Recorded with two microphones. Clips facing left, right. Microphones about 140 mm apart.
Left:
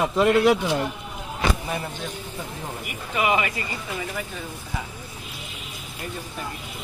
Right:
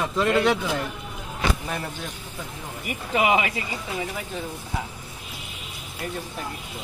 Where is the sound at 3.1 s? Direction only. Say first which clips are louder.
Right 1 dB; 15° right (ahead or behind).